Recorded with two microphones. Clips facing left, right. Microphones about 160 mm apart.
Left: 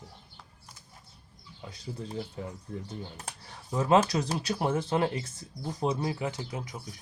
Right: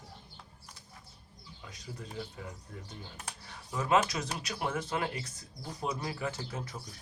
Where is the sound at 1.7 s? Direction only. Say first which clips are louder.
Left 6 dB; 30° left (ahead or behind).